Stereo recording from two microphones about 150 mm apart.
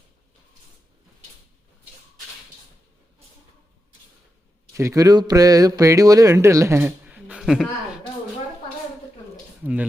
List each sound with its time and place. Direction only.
4.7 s speech: 20° right (ahead or behind); by 7.7 s centre (ahead or behind)